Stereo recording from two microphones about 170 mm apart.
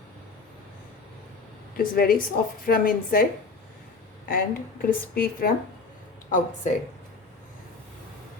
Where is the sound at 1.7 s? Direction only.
60° left (ahead or behind).